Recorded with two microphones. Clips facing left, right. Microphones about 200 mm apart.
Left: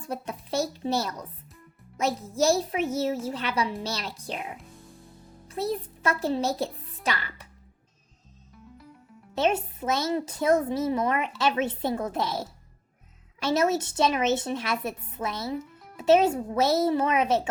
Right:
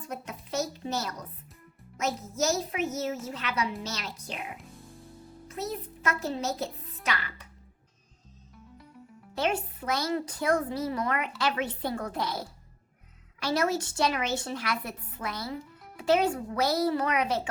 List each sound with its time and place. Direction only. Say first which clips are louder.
0.1 s a child's voice: left 4 dB; 30° left (ahead or behind)
5.5 s a child's voice: left 6 dB; 30° left (ahead or behind)
9.3 s a woman's voice: left 4 dB; 25° left (ahead or behind)
13.4 s a woman's voice: left 4 dB; 20° left (ahead or behind)